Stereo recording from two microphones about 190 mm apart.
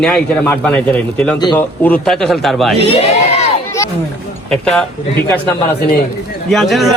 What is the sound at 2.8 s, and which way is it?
Speech, 35° left (ahead or behind).